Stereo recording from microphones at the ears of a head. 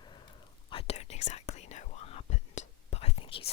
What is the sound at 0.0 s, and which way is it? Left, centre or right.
Whispering, left.